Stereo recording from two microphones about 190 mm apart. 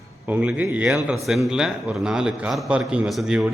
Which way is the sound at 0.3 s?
5° right (ahead or behind).